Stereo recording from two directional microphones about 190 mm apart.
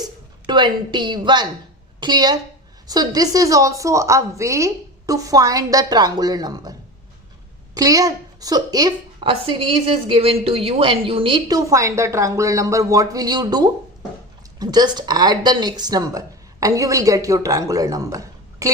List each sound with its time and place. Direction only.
0.0 s a woman's voice: 25° right (ahead or behind)
7.8 s a woman's voice: 20° right (ahead or behind)